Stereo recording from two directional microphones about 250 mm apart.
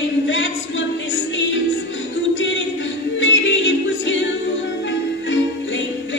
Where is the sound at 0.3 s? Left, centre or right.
Left.